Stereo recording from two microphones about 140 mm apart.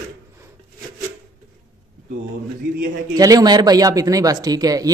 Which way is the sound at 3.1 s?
25° right (ahead or behind).